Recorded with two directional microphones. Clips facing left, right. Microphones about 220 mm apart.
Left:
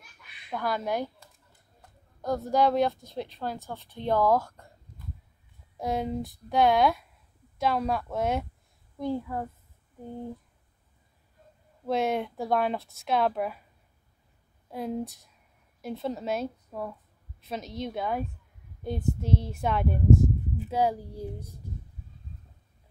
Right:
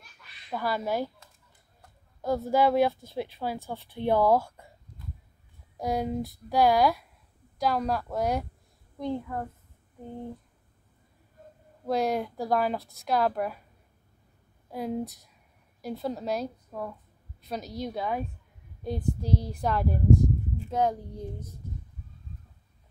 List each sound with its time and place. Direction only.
0.5 s speech: 5° right (ahead or behind)
2.2 s speech: 5° right (ahead or behind)
5.8 s speech: centre (ahead or behind)
11.8 s speech: centre (ahead or behind)
14.7 s speech: centre (ahead or behind)
17.4 s a sound: centre (ahead or behind)
17.8 s speech: centre (ahead or behind)
18.9 s child singing: 25° left (ahead or behind)
19.6 s speech: centre (ahead or behind)